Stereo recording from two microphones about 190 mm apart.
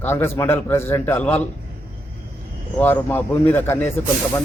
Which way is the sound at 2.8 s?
10° left (ahead or behind).